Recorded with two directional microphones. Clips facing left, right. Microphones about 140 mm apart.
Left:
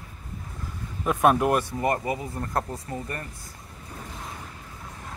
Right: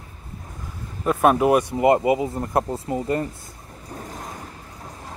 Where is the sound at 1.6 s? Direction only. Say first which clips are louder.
Right 9 dB; 20° right (ahead or behind).